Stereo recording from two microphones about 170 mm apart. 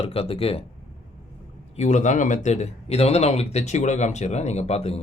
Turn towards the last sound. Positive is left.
turn(degrees=35)  # may be behind; listen again after turning